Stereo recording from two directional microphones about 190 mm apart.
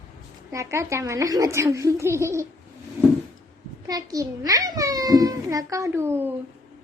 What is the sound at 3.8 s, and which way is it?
A child's voice, 20° right (ahead or behind).